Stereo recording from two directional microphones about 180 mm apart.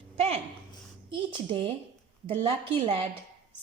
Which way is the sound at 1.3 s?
30° right (ahead or behind).